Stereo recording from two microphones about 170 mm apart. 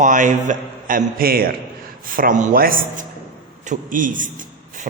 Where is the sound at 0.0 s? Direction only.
50° right (ahead or behind).